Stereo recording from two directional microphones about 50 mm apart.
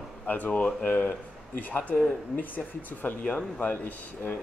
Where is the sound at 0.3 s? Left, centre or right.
Left.